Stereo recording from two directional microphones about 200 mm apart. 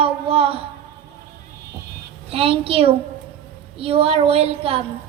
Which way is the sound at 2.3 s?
30° right (ahead or behind).